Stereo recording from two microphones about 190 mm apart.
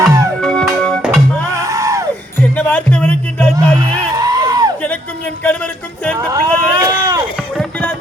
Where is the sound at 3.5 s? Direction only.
20° right (ahead or behind).